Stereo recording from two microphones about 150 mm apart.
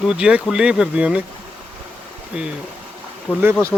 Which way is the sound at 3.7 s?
5° left (ahead or behind).